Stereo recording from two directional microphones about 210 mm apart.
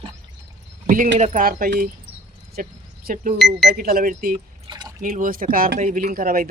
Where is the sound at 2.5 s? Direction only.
45° right (ahead or behind).